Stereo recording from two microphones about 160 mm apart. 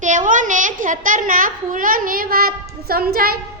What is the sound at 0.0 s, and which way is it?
A woman's voice, 50° right (ahead or behind).